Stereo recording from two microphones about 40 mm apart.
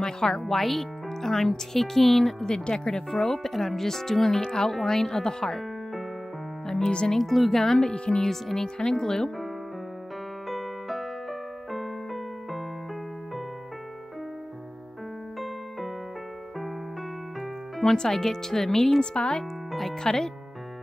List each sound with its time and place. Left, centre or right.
0.0 s speech: centre
2.4 s speech: centre
3.1 s speech: centre
7.1 s speech: centre
7.6 s speech: centre
7.9 s speech: left
8.2 s speech: centre
10.5 s music: centre
11.7 s keyboard: centre
17.9 s speech: centre
19.1 s speech: left
20.0 s speech: centre